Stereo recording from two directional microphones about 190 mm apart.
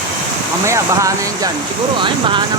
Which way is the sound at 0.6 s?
15° right (ahead or behind).